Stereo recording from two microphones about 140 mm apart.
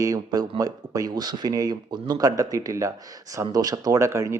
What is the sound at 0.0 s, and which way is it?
Speech, 25° right (ahead or behind).